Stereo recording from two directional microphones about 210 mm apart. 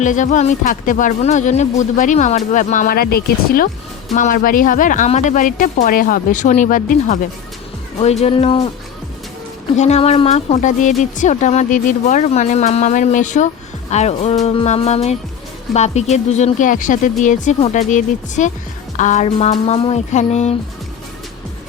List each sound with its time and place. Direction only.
0.0 s a woman's voice: 35° left (ahead or behind)
8.2 s speech: 30° left (ahead or behind)
9.7 s a woman's voice: 30° left (ahead or behind)